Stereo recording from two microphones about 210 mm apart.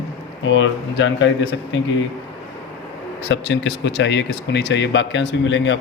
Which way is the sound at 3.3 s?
60° left (ahead or behind).